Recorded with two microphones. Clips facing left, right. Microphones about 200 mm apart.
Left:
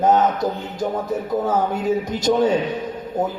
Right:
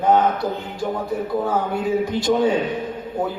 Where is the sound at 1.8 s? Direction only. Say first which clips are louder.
Even; 40° left (ahead or behind).